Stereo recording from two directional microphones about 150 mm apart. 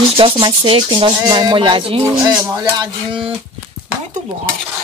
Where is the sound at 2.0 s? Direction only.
20° right (ahead or behind).